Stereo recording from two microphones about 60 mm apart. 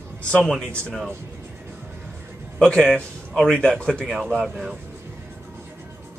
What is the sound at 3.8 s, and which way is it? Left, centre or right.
Speech, centre.